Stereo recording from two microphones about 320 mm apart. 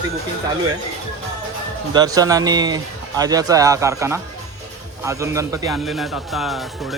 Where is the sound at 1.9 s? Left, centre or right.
Centre.